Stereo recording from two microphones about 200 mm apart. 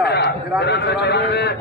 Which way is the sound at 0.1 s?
55° left (ahead or behind).